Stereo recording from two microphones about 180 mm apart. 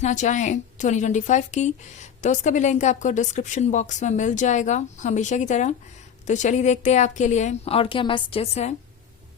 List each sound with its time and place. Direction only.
0.0 s a woman's voice: 40° left (ahead or behind)